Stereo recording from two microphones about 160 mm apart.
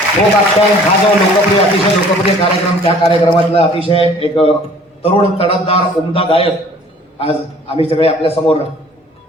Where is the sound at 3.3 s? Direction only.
35° left (ahead or behind).